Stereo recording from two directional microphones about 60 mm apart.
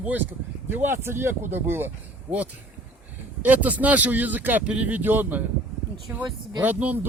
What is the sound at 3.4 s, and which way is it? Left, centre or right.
Speech, right.